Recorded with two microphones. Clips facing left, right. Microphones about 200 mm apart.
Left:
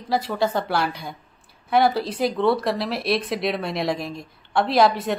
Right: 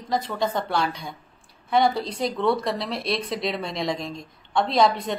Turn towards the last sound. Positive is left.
turn(degrees=5)  # may be behind; listen again after turning